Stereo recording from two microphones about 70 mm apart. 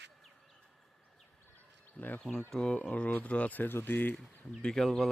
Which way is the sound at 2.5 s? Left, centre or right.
Centre.